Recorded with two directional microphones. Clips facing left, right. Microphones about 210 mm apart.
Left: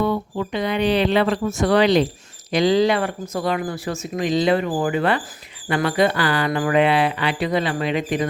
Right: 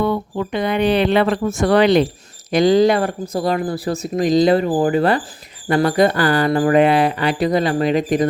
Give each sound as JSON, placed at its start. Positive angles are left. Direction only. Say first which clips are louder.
{"t": 0.0, "sound": "speech", "louder": "right 2 dB", "side_deg": -55}